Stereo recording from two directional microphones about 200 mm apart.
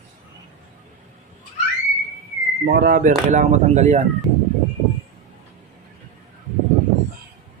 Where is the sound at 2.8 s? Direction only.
45° right (ahead or behind).